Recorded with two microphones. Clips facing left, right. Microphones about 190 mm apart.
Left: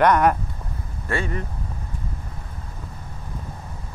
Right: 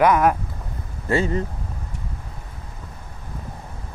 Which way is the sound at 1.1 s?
25° right (ahead or behind).